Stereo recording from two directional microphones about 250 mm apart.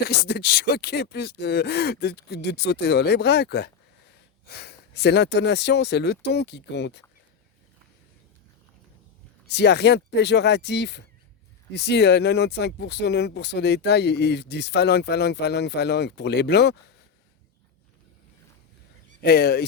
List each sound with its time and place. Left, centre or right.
0.0 s speech: left
9.5 s speech: left
19.2 s speech: left